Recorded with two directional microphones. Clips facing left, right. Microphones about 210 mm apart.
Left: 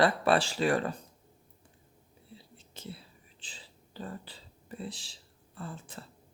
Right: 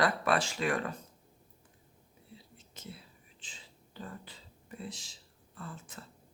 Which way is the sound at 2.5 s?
30° left (ahead or behind).